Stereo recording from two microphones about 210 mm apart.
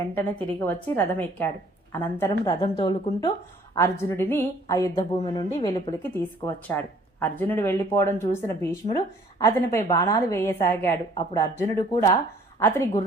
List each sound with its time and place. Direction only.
0.1 s speech: 10° left (ahead or behind)
2.4 s speech: 20° left (ahead or behind)
6.0 s speech: 10° left (ahead or behind)